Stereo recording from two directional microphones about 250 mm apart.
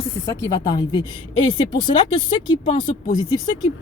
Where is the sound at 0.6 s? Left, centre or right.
Centre.